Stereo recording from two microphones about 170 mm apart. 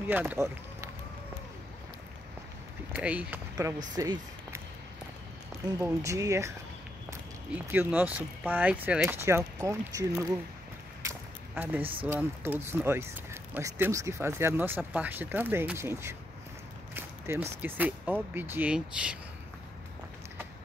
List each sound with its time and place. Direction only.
0.1 s speech: 10° right (ahead or behind)
2.9 s speech: 10° right (ahead or behind)
3.9 s speech: 20° right (ahead or behind)
5.8 s speech: 15° right (ahead or behind)
11.1 s a sound: 10° right (ahead or behind)
11.8 s speech: 30° right (ahead or behind)
12.1 s speech: 10° right (ahead or behind)